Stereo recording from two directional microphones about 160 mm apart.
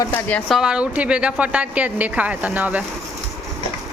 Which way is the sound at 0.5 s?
5° right (ahead or behind).